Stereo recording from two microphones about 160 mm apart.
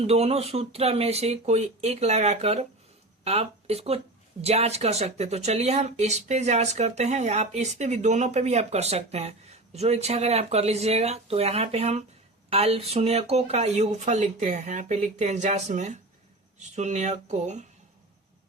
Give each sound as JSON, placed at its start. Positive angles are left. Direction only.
{"t": 0.0, "sound": "speech", "side_deg": -40}